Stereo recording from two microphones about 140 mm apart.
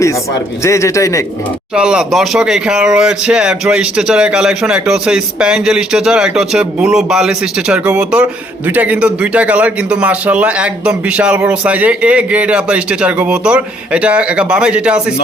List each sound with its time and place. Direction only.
0.6 s a man's voice: 20° left (ahead or behind)
1.7 s speech: 5° right (ahead or behind)